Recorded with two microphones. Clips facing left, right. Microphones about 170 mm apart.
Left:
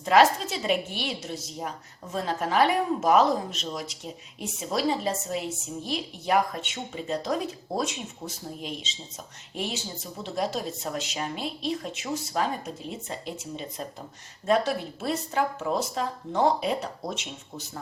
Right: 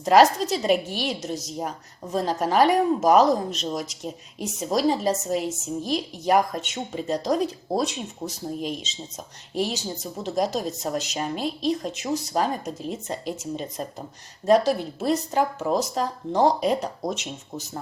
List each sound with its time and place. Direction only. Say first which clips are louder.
0.0 s a woman's voice: right 3 dB; 40° right (ahead or behind)